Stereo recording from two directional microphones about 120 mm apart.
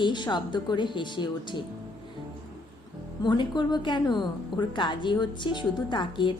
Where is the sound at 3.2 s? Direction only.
40° left (ahead or behind).